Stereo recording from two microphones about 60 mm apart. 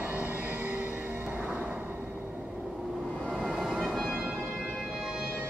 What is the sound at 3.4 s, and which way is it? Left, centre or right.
Music, centre.